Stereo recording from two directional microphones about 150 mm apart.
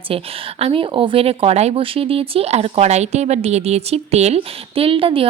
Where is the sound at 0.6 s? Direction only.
35° right (ahead or behind).